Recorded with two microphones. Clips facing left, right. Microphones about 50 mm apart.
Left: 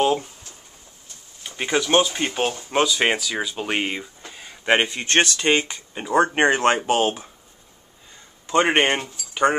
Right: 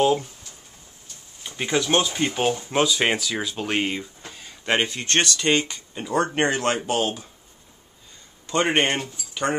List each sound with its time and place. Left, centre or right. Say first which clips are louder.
0.0 s speech: even; centre
1.4 s a sound: left 1 dB; centre
1.7 s speech: left 3 dB; centre
2.4 s speech: left 1 dB; centre; by 7.2 s left
8.5 s speech: left 3 dB; centre